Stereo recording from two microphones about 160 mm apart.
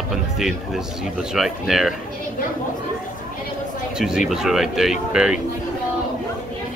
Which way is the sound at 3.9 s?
5° right (ahead or behind).